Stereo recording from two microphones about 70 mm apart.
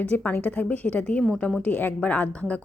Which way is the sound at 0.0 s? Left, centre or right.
Left.